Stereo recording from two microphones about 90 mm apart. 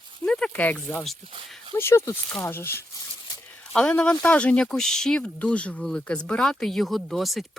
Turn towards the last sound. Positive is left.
turn(degrees=0)  # may be behind; listen again after turning